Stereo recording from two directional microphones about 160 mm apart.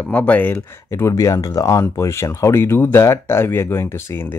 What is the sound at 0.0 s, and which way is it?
Speech, 10° left (ahead or behind).